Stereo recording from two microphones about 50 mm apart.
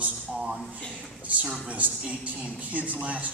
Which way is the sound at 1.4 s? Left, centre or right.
Centre.